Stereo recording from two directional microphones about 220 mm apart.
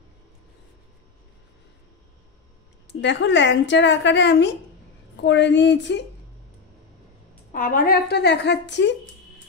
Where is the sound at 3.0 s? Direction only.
55° left (ahead or behind).